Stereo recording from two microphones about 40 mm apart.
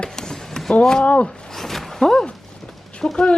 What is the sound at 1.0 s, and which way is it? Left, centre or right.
Speech, left.